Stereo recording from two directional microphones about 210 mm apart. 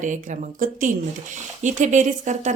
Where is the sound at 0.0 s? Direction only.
40° right (ahead or behind).